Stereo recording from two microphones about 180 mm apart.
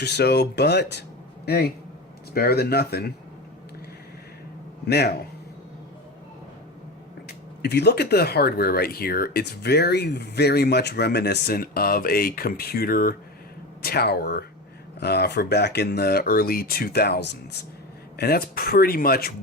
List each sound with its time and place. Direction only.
0.0 s speech: 65° left (ahead or behind)
4.9 s speech: 65° left (ahead or behind)
7.3 s speech: 65° left (ahead or behind)
18.2 s speech: 60° left (ahead or behind)